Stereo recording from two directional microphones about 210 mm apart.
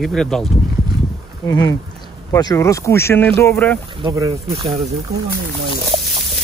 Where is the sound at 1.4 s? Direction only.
15° left (ahead or behind).